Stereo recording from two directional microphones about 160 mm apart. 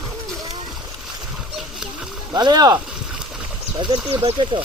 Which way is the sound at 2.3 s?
25° right (ahead or behind).